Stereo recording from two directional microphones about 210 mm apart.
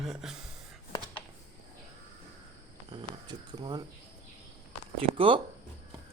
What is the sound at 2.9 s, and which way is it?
Speech, 20° right (ahead or behind).